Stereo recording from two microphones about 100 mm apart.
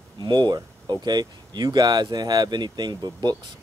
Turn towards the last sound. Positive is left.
turn(degrees=-45)  # may be behind; listen again after turning